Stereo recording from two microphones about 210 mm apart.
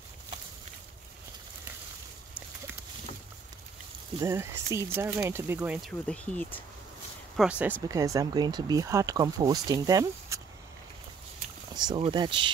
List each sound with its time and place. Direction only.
4.2 s speech: 15° right (ahead or behind); by 6.6 s 5° left (ahead or behind)
7.3 s speech: 5° right (ahead or behind)
11.9 s speech: 20° right (ahead or behind)